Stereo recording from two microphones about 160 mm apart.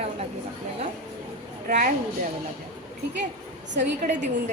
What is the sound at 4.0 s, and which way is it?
Speech, 50° right (ahead or behind).